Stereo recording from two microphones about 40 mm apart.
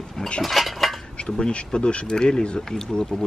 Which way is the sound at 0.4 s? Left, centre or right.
Centre.